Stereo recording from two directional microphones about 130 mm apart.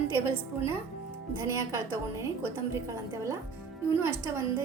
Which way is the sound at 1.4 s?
20° right (ahead or behind).